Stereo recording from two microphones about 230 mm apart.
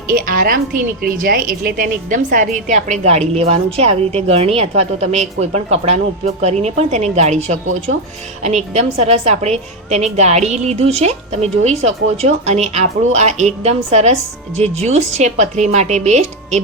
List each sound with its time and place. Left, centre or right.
0.1 s a woman's voice: right